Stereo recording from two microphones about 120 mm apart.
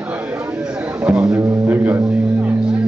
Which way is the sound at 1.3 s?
15° right (ahead or behind).